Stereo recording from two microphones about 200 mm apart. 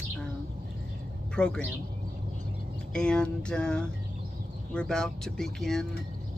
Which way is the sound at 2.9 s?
5° left (ahead or behind).